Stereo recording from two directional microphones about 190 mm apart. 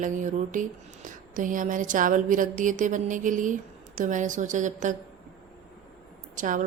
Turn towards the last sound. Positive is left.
turn(degrees=-45)  # may be behind; listen again after turning